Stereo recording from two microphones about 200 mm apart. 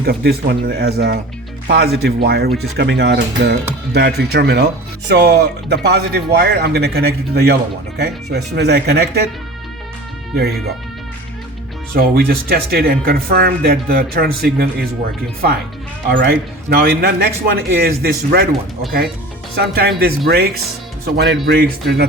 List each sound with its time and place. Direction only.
0.0 s speech: 50° right (ahead or behind)
10.3 s speech: 55° right (ahead or behind)
11.9 s speech: 50° right (ahead or behind)
16.0 s speech: 55° right (ahead or behind)
19.5 s speech: 50° right (ahead or behind)